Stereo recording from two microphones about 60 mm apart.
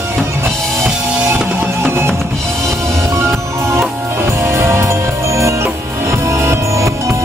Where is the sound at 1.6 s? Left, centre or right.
Right.